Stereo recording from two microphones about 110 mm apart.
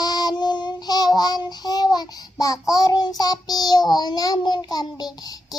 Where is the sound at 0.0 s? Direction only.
35° left (ahead or behind).